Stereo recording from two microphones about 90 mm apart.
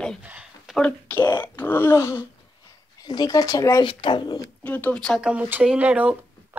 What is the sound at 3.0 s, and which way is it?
Speech, 50° left (ahead or behind).